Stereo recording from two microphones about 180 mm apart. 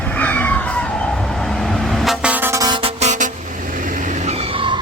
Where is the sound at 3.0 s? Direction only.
45° right (ahead or behind).